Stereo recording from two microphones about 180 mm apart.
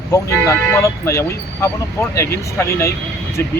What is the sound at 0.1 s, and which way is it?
Speech, 15° left (ahead or behind).